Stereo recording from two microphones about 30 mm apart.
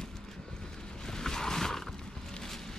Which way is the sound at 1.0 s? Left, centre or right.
Centre.